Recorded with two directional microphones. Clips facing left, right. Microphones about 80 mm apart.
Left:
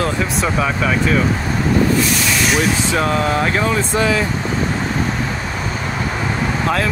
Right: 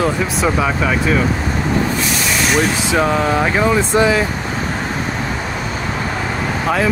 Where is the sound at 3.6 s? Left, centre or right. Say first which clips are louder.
Right 3 dB; centre.